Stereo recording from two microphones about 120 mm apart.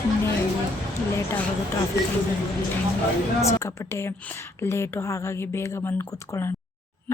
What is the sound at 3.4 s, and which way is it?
Speech, 25° left (ahead or behind).